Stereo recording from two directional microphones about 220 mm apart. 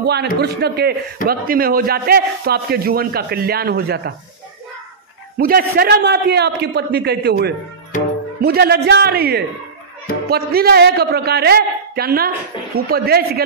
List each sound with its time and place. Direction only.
0.0 s a man's voice: 50° right (ahead or behind)
5.4 s a man's voice: 45° right (ahead or behind)